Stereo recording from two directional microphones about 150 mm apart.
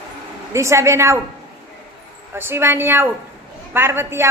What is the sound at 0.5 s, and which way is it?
Speech, 20° right (ahead or behind).